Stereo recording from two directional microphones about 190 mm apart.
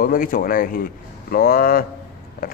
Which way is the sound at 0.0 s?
45° left (ahead or behind).